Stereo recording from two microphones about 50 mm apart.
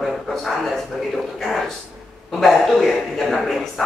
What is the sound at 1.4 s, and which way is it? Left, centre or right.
A man's voice, centre.